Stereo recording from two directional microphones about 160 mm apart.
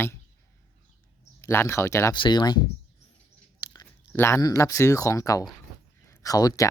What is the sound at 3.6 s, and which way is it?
Speech, 20° left (ahead or behind).